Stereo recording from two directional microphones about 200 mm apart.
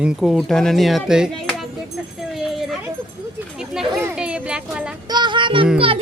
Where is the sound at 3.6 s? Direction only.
Centre (ahead or behind).